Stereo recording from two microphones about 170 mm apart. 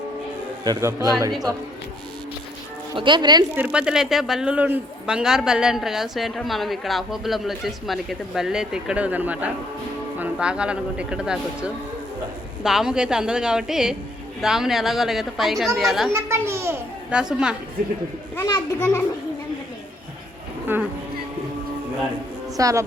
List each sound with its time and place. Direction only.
0.6 s a man's voice: 20° right (ahead or behind)
2.9 s a man's voice: 25° right (ahead or behind)
3.5 s speech: 10° right (ahead or behind)
16.1 s speech: 15° right (ahead or behind)
17.2 s speech: 5° right (ahead or behind)
18.3 s a child's voice: 20° left (ahead or behind)
20.7 s speech: 10° right (ahead or behind)
22.5 s a man's voice: 20° right (ahead or behind)